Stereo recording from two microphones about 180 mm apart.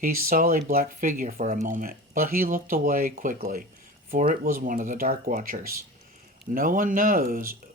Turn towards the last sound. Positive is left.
turn(degrees=-55)  # may be behind; listen again after turning